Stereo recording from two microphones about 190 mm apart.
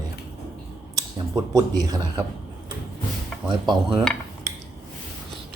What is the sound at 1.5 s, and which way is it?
Speech, 20° right (ahead or behind).